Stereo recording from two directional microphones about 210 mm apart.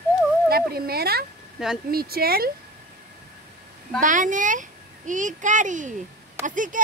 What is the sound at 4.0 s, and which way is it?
A child's voice, 40° right (ahead or behind).